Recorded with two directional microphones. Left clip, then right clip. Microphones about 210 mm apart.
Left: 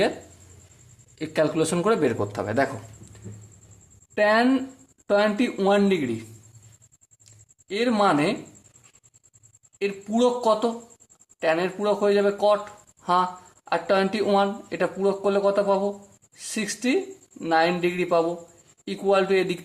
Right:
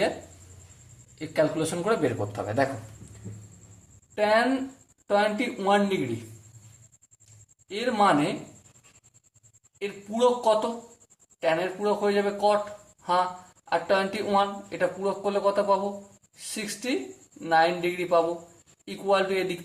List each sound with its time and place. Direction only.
1.2 s a man's voice: 40° left (ahead or behind)
4.1 s speech: 45° left (ahead or behind)
7.7 s speech: 45° left (ahead or behind)
9.7 s speech: 45° left (ahead or behind)
13.7 s speech: 45° left (ahead or behind)